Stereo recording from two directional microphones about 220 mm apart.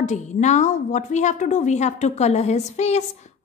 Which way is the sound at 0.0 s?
35° left (ahead or behind).